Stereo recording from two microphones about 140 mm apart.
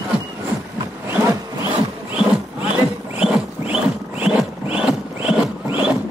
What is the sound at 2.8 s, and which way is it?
Rodents, 10° right (ahead or behind).